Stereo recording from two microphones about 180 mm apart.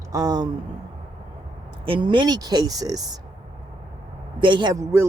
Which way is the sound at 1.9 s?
25° right (ahead or behind).